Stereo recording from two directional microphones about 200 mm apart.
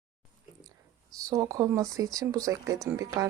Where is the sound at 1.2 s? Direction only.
15° right (ahead or behind).